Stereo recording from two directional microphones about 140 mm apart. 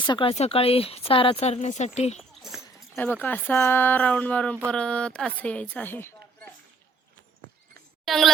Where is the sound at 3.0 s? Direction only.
15° left (ahead or behind).